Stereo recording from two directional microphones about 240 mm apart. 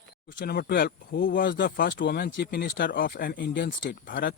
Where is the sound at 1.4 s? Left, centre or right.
Left.